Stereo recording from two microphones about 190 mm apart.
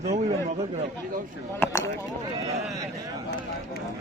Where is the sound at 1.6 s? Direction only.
15° left (ahead or behind).